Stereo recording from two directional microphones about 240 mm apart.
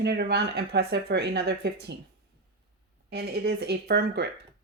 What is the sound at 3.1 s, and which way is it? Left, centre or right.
A woman's voice, right.